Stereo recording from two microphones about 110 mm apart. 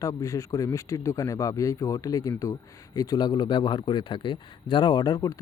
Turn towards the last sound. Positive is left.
turn(degrees=35)  # may be behind; listen again after turning